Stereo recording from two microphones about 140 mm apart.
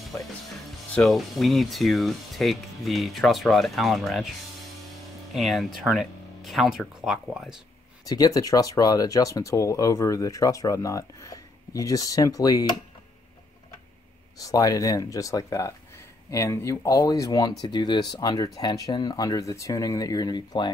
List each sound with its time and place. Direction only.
0.1 s speech: 15° left (ahead or behind)
0.9 s speech: centre (ahead or behind)
5.3 s speech: centre (ahead or behind)
8.0 s speech: 25° left (ahead or behind)
14.4 s speech: 25° left (ahead or behind)